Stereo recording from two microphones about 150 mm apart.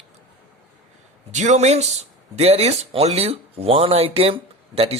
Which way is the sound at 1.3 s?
50° right (ahead or behind).